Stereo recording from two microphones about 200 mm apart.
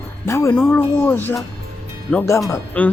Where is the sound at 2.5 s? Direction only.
5° left (ahead or behind).